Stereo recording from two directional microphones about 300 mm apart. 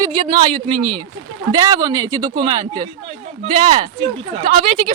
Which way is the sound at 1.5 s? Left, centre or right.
Centre.